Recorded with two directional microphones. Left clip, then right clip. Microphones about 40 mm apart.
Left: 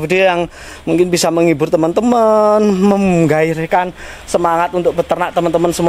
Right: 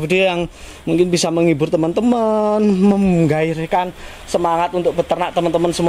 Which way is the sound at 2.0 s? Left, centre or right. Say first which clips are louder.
Left 8 dB; left.